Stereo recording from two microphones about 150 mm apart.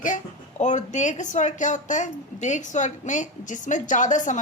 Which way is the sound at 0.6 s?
55° left (ahead or behind).